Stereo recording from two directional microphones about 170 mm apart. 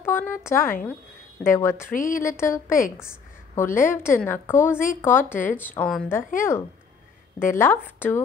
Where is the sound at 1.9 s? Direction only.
50° left (ahead or behind).